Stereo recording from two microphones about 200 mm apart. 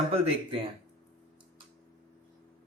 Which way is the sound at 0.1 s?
30° right (ahead or behind).